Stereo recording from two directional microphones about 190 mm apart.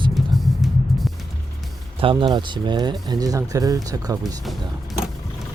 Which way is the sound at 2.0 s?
25° right (ahead or behind).